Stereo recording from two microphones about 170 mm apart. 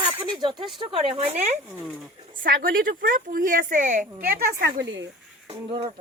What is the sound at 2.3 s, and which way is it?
A woman's voice, 55° right (ahead or behind).